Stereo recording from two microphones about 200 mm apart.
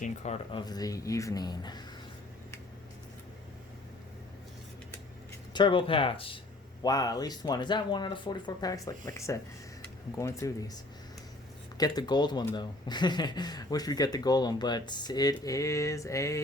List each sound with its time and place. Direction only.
0.0 s speech: 35° left (ahead or behind)
0.6 s speech: 20° left (ahead or behind)
5.5 s speech: 25° left (ahead or behind)
11.8 s speech: 20° left (ahead or behind)